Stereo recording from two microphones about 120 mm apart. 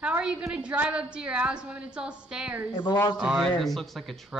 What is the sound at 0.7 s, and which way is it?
A woman's voice, 10° right (ahead or behind).